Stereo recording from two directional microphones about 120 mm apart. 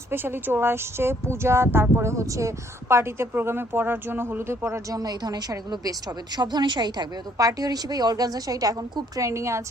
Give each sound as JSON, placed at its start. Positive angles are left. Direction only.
{"t": 0.1, "sound": "speech", "side_deg": -20}